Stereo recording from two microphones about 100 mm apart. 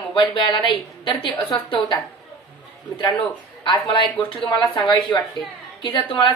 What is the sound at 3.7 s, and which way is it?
A woman's voice, 55° left (ahead or behind).